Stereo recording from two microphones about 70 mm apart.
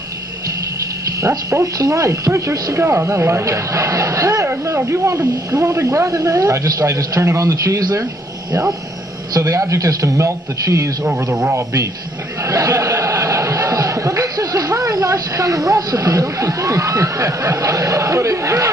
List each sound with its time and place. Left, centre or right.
1.5 s a man's voice: right
2.8 s a man's voice: right
9.4 s a man's voice: right
11.4 s a man's voice: right
12.4 s a sound: right